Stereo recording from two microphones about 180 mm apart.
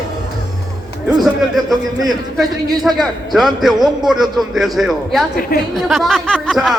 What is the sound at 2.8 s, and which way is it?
A man's voice, centre (ahead or behind).